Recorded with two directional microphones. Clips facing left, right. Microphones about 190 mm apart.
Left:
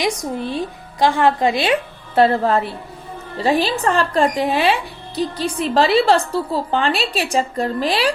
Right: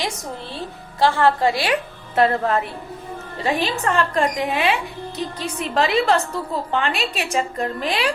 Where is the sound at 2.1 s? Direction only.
30° left (ahead or behind).